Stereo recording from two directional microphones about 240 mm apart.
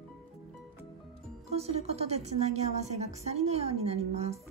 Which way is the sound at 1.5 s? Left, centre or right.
Right.